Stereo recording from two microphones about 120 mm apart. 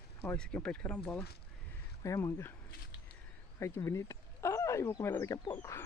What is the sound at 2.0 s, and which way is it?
Speech, 25° left (ahead or behind).